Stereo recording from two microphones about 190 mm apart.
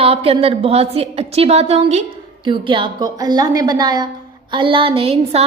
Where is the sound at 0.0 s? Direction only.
30° right (ahead or behind).